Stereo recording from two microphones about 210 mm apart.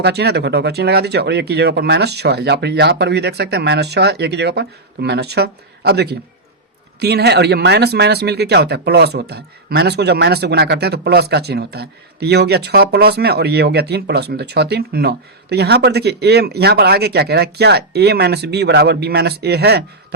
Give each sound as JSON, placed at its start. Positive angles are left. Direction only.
{"t": 0.0, "sound": "speech", "side_deg": -50}